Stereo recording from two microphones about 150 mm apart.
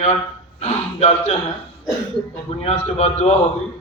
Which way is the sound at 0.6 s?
45° left (ahead or behind).